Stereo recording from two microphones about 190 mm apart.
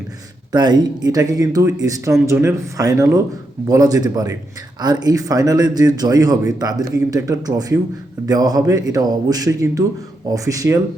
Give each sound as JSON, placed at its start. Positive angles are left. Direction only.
{"t": 0.5, "sound": "speech", "side_deg": -20}